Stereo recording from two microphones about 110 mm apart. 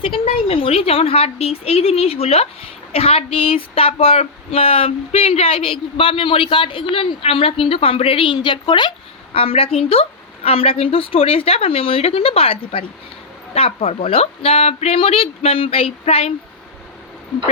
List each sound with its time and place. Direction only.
0.0 s speech: 55° left (ahead or behind)
9.3 s speech: 60° left (ahead or behind)